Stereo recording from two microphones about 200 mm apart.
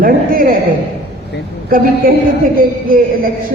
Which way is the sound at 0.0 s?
45° right (ahead or behind).